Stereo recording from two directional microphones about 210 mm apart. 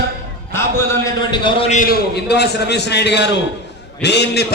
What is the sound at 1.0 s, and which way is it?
Speech, 20° left (ahead or behind).